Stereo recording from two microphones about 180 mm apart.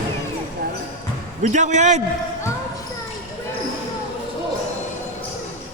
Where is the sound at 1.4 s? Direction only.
40° right (ahead or behind).